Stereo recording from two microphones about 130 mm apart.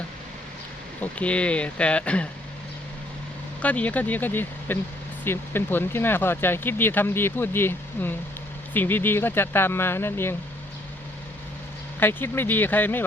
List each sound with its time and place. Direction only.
1.0 s speech: 10° left (ahead or behind)
3.6 s speech: 10° left (ahead or behind)
11.9 s speech: 15° left (ahead or behind)